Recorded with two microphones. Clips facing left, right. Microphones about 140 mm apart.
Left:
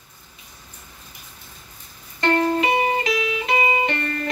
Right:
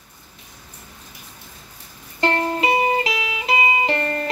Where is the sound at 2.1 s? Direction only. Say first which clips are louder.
Left 2 dB; 30° right (ahead or behind).